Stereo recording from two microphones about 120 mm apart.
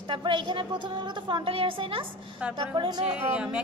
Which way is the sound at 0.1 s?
40° right (ahead or behind).